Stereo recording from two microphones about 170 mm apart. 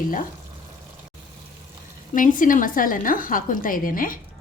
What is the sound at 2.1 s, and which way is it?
Speech, 50° left (ahead or behind).